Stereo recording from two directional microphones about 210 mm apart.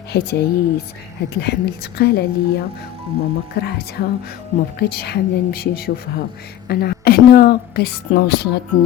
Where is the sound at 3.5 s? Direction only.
50° left (ahead or behind).